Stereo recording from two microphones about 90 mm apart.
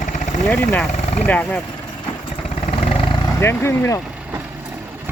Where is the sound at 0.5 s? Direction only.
20° left (ahead or behind).